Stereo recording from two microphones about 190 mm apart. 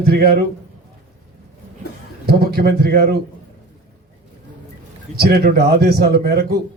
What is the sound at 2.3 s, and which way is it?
Speech, 55° right (ahead or behind).